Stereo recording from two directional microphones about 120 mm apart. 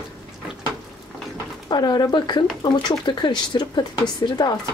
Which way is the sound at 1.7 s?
35° left (ahead or behind).